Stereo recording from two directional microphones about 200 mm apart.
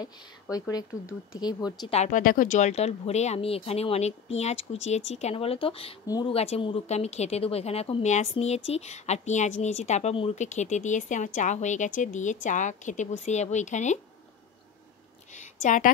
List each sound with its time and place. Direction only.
0.0 s speech: 20° left (ahead or behind)
2.0 s speech: 40° left (ahead or behind); by 6.3 s 20° left (ahead or behind)
6.3 s speech: 30° left (ahead or behind)
15.3 s a sound: 40° left (ahead or behind)